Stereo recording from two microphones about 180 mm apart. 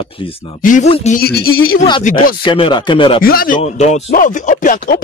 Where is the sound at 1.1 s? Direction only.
60° left (ahead or behind).